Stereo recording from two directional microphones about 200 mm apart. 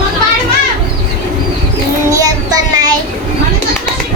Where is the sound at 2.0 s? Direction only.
15° right (ahead or behind).